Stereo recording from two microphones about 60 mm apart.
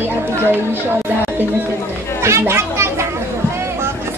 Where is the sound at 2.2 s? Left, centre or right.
Right.